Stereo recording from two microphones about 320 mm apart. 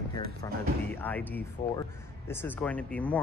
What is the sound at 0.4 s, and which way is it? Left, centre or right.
Speech, centre.